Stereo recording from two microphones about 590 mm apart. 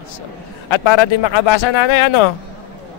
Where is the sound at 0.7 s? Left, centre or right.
Left.